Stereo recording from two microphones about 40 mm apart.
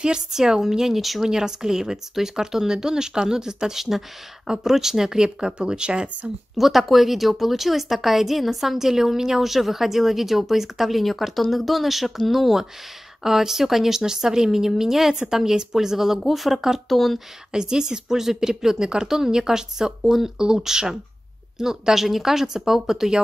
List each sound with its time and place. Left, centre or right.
0.3 s a woman's voice: centre
1.3 s a woman's voice: centre
6.5 s a woman's voice: centre
17.5 s a woman's voice: centre